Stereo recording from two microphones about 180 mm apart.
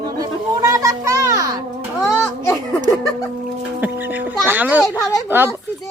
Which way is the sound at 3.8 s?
10° right (ahead or behind).